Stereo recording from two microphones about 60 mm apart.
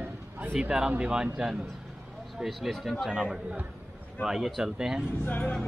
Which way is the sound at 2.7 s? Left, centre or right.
Centre.